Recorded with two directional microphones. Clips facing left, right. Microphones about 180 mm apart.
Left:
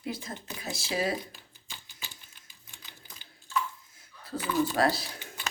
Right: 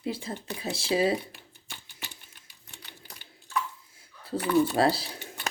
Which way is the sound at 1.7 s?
65° right (ahead or behind).